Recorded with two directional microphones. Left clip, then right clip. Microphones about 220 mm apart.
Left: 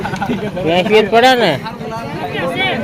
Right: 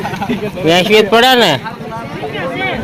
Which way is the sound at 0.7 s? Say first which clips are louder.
Right 2 dB; 25° right (ahead or behind).